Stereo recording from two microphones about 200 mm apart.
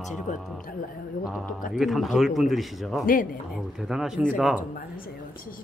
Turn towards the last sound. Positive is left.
turn(degrees=-5)  # may be behind; listen again after turning